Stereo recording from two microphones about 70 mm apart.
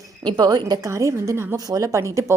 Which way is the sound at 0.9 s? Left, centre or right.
Right.